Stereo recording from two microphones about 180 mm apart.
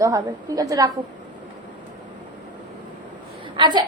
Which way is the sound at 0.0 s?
20° right (ahead or behind).